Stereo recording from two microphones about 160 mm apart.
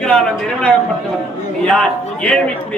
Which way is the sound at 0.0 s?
5° left (ahead or behind).